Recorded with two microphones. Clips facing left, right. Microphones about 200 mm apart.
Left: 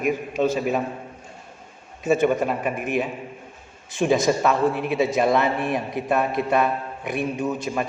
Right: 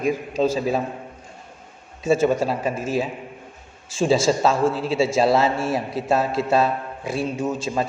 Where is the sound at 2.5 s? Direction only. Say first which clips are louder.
Right 1 dB; 25° right (ahead or behind).